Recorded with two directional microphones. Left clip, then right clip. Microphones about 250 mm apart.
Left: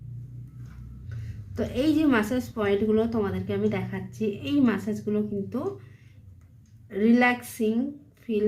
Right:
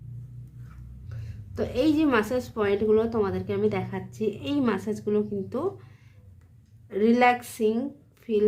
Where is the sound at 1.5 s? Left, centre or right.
Right.